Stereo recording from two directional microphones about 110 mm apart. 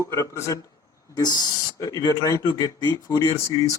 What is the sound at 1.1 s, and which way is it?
Speech, 40° left (ahead or behind).